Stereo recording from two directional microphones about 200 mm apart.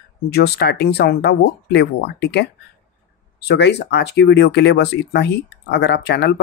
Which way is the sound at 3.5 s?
55° left (ahead or behind).